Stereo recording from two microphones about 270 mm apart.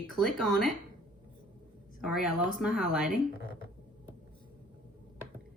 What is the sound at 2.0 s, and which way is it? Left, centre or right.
A woman's voice, centre.